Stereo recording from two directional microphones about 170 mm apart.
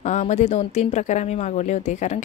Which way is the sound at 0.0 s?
45° left (ahead or behind).